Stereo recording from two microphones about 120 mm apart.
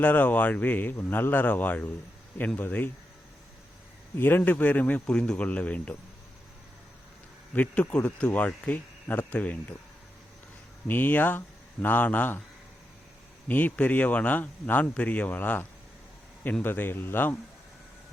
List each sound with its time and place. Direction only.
0.0 s speech: 15° left (ahead or behind)
4.2 s speech: 15° left (ahead or behind)
7.5 s speech: 10° left (ahead or behind)
10.8 s speech: 15° left (ahead or behind)
13.5 s speech: 15° left (ahead or behind)